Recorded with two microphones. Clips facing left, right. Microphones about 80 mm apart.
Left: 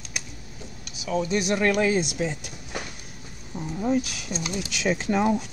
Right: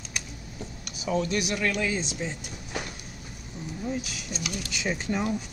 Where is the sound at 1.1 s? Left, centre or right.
Centre.